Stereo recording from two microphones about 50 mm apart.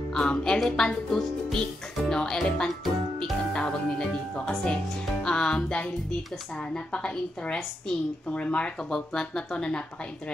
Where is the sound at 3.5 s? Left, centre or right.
Centre.